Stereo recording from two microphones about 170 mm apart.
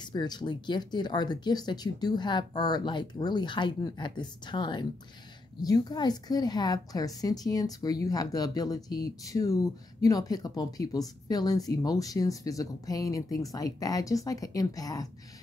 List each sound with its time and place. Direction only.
0.1 s speech: 25° left (ahead or behind)